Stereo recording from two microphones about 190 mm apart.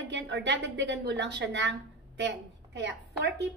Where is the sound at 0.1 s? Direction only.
65° right (ahead or behind).